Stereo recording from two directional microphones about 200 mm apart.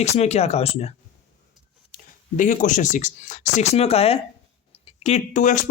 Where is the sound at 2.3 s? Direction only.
40° left (ahead or behind).